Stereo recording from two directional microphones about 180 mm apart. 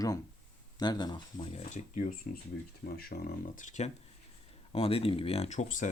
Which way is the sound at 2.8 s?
55° left (ahead or behind).